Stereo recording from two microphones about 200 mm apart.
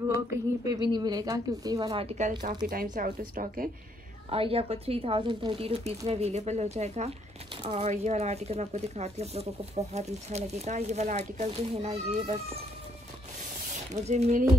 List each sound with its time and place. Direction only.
0.1 s a sound: 15° right (ahead or behind)
0.8 s speech: 20° right (ahead or behind)
2.7 s speech: 45° right (ahead or behind)
4.3 s speech: 30° right (ahead or behind)
14.0 s speech: 35° right (ahead or behind)